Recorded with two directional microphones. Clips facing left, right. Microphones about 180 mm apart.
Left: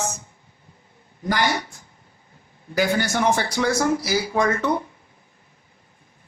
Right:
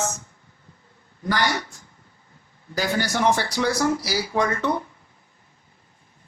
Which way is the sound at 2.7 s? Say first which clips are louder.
Left 3 dB; 55° left (ahead or behind).